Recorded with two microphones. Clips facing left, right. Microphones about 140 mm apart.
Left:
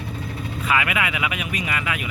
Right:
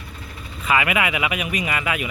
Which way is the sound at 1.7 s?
20° right (ahead or behind).